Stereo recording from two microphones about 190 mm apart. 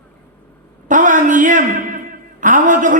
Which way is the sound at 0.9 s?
40° right (ahead or behind).